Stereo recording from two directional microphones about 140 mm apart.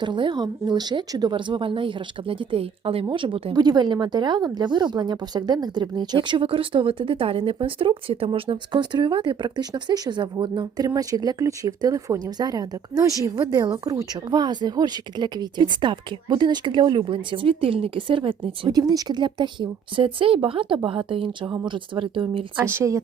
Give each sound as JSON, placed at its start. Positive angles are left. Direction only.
{"t": 0.0, "sound": "speech", "side_deg": -35}
{"t": 3.5, "sound": "speech", "side_deg": -30}
{"t": 22.5, "sound": "speech", "side_deg": -20}